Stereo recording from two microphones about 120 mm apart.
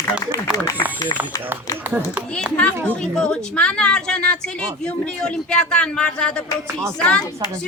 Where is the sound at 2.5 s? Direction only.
10° left (ahead or behind).